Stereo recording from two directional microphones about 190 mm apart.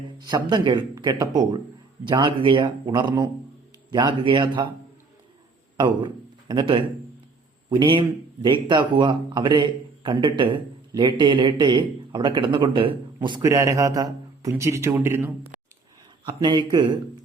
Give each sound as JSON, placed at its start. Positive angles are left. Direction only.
{"t": 0.2, "sound": "speech", "side_deg": -20}
{"t": 5.7, "sound": "a man's voice", "side_deg": -25}
{"t": 16.2, "sound": "speech", "side_deg": -25}